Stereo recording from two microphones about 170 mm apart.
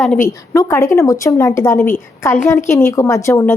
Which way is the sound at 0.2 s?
20° left (ahead or behind).